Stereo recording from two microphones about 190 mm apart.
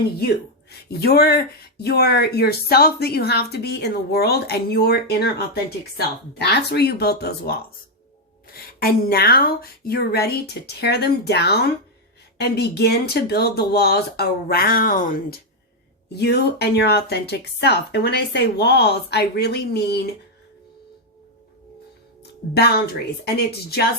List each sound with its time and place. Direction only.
0.7 s speech: 60° left (ahead or behind)
16.1 s speech: 60° left (ahead or behind)
22.2 s speech: 60° left (ahead or behind)